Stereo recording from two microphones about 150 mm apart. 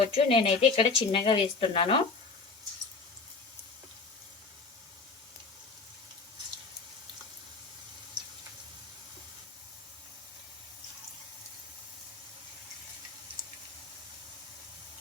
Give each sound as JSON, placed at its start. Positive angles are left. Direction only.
{"t": 0.1, "sound": "speech", "side_deg": 35}